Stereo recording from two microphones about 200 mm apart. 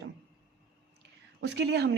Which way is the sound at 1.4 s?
60° right (ahead or behind).